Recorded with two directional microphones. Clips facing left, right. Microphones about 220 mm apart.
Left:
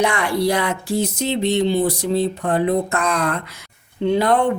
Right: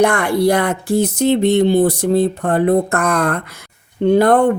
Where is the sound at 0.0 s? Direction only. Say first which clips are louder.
Right 5 dB; 50° right (ahead or behind).